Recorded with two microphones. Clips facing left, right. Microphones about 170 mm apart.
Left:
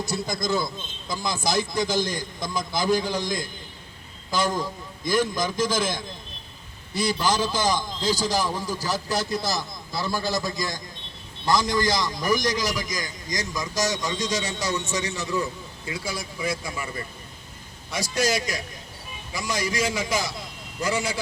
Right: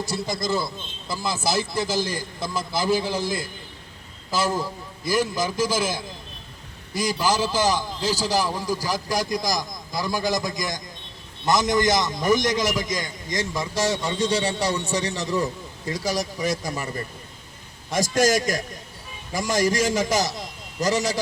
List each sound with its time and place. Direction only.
0.0 s a man's voice: centre (ahead or behind); by 21.2 s 40° right (ahead or behind)